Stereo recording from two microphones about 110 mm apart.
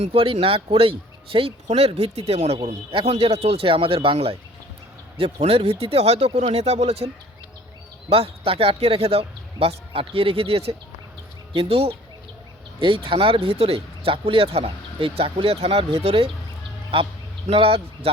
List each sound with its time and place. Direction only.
0.0 s speech: 60° right (ahead or behind)
2.6 s speech: 60° right (ahead or behind)
8.1 s speech: 60° right (ahead or behind)
12.8 s speech: 50° right (ahead or behind)
17.5 s speech: 60° right (ahead or behind)